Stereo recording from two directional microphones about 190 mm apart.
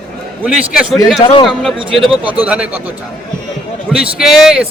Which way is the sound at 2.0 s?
5° right (ahead or behind).